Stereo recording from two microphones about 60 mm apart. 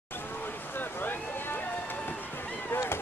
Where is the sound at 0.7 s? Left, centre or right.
Left.